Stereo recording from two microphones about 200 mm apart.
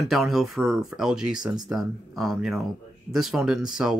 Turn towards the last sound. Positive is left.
turn(degrees=0)  # may be behind; listen again after turning